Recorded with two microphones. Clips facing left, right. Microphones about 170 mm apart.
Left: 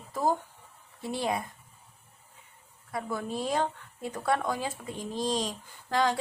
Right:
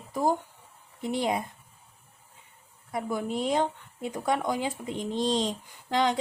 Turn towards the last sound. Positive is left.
turn(degrees=-20)  # may be behind; listen again after turning